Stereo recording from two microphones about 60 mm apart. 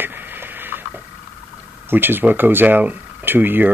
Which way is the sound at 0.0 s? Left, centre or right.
Right.